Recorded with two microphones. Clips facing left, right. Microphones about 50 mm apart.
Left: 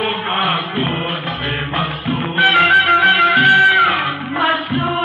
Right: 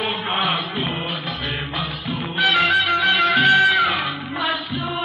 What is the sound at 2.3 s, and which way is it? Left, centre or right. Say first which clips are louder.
Music: left 6 dB; left.